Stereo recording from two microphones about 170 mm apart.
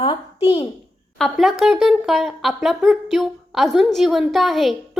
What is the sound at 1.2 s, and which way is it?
Speech, centre (ahead or behind).